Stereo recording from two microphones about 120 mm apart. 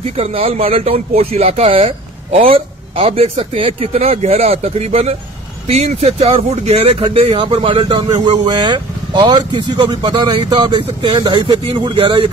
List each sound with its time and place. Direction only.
0.2 s speech: 50° right (ahead or behind)